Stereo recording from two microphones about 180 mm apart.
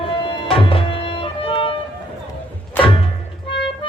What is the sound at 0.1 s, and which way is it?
Music, 30° left (ahead or behind).